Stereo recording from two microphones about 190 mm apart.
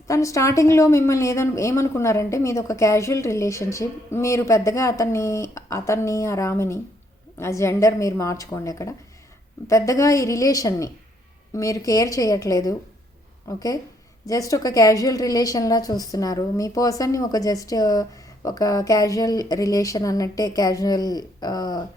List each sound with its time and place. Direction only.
0.1 s a woman's voice: 15° left (ahead or behind)